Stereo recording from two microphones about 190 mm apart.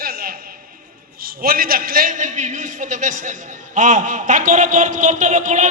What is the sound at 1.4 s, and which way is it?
A man's voice, 50° right (ahead or behind).